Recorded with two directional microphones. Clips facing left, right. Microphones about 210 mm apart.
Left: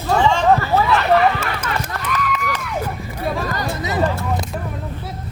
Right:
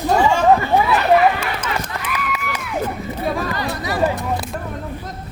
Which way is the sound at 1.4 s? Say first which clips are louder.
Even; 10° right (ahead or behind).